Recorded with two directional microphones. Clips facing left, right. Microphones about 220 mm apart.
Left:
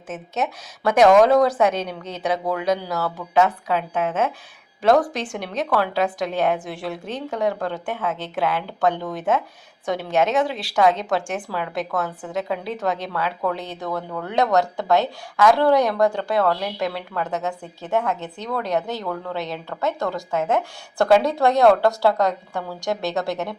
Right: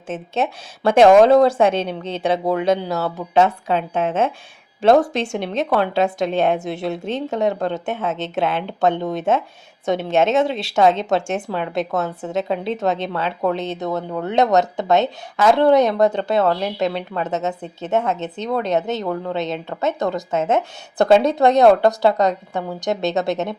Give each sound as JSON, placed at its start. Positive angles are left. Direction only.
{"t": 0.1, "sound": "speech", "side_deg": -30}